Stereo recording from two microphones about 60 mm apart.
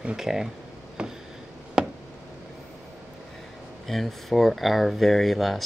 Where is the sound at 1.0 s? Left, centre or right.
Centre.